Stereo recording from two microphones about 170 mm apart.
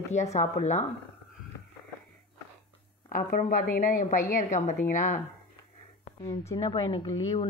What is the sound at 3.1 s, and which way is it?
A woman's voice, 50° left (ahead or behind).